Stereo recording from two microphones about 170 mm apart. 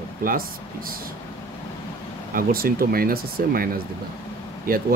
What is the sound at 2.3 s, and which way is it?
Speech, 60° right (ahead or behind).